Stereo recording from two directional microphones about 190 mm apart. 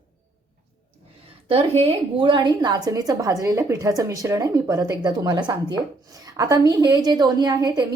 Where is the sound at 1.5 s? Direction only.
30° right (ahead or behind).